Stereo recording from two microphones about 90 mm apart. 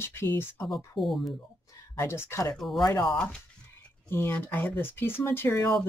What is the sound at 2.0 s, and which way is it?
Speech, 30° left (ahead or behind).